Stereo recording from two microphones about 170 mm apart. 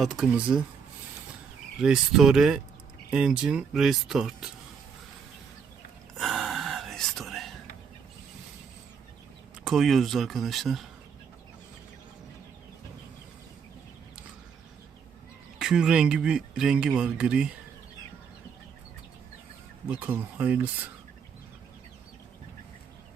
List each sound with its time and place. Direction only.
0.0 s speech: 5° right (ahead or behind)
1.8 s speech: 5° right (ahead or behind)
6.1 s whispering: centre (ahead or behind)
9.6 s speech: centre (ahead or behind)
15.5 s speech: 5° right (ahead or behind)
19.9 s speech: 10° right (ahead or behind)